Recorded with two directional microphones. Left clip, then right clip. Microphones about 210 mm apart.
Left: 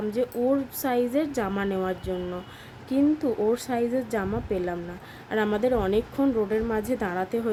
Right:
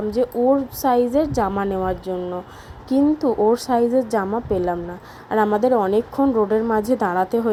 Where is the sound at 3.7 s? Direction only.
5° left (ahead or behind).